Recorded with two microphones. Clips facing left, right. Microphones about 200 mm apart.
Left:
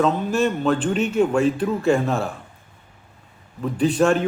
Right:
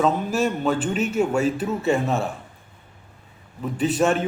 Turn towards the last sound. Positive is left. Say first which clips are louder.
# left 2 dB
turn(degrees=-5)  # may be behind; listen again after turning